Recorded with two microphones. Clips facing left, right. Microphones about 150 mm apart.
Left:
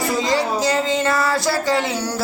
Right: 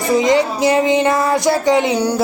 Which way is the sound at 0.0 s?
20° right (ahead or behind).